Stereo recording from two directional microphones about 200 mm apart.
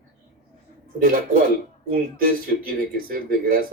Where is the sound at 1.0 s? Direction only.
45° right (ahead or behind).